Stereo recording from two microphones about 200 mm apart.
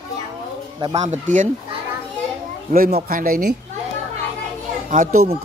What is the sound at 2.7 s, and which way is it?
Speech, 50° right (ahead or behind).